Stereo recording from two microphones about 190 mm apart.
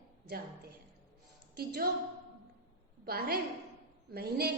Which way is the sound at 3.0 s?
55° right (ahead or behind).